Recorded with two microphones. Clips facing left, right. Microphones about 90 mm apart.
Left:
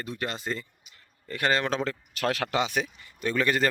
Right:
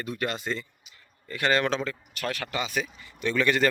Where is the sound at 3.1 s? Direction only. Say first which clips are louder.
Right 1 dB; 40° left (ahead or behind).